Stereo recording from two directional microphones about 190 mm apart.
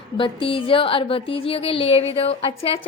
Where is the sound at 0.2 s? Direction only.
25° left (ahead or behind).